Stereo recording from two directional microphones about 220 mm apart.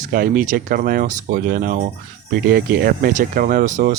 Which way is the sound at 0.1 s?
40° right (ahead or behind).